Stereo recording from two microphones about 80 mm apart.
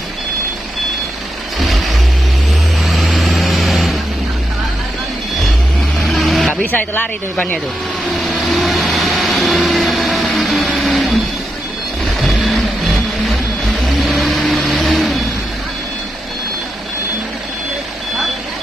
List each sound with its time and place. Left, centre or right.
1.6 s vehicle: centre
6.0 s vehicle: centre
6.5 s speech: left
8.5 s vehicle: centre
12.2 s vehicle: centre